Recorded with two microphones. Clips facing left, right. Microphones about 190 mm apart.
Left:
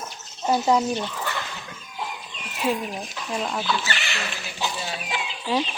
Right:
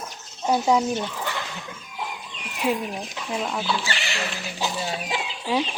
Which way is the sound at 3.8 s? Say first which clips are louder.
Right 1 dB; 35° right (ahead or behind).